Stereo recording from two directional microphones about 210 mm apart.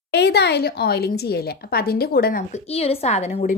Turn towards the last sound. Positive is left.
turn(degrees=30)  # may be behind; listen again after turning